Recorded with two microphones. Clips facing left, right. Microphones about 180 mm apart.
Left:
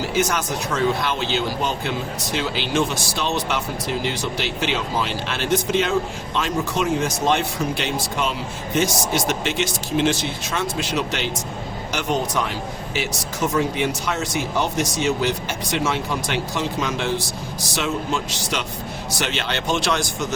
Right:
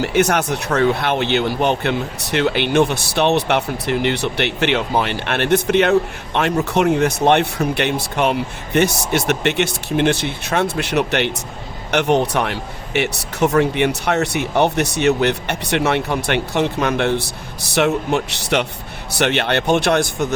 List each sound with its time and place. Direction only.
0.0 s speech: 65° right (ahead or behind)